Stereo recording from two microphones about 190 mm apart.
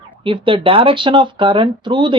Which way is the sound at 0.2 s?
30° right (ahead or behind).